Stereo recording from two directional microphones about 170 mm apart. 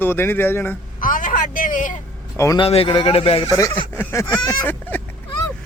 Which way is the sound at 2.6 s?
35° left (ahead or behind).